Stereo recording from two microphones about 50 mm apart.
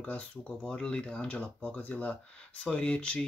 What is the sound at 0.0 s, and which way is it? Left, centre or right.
Speech, left.